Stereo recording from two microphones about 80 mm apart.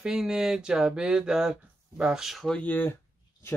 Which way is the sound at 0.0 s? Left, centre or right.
Centre.